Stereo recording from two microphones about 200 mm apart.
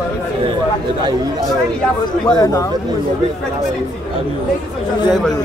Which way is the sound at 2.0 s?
20° left (ahead or behind).